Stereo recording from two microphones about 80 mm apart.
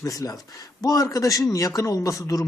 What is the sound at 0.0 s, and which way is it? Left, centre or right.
A man's voice, left.